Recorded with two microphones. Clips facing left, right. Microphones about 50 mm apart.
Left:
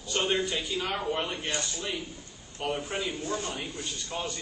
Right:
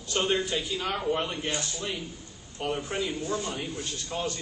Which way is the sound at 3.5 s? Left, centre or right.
Centre.